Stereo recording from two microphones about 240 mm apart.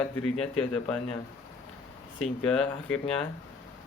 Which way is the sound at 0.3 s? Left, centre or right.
Centre.